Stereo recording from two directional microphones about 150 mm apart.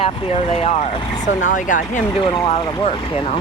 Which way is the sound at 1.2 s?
60° left (ahead or behind).